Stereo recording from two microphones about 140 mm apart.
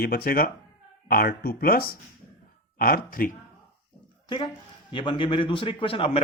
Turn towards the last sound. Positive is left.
turn(degrees=40)  # may be behind; listen again after turning